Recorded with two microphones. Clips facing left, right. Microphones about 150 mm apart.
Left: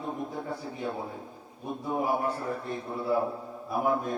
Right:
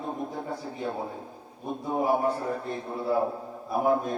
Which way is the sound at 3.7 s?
30° right (ahead or behind).